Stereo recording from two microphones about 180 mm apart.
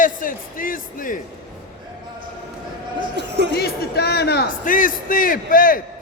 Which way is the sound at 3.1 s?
70° right (ahead or behind).